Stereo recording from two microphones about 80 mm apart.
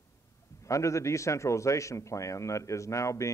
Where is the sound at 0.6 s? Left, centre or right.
Left.